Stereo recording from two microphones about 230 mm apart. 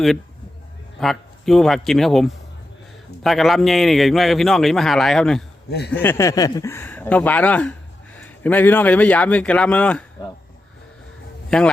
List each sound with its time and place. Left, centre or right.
0.9 s a man's voice: centre
5.7 s speech: left
6.0 s speech: centre
11.5 s a man's voice: centre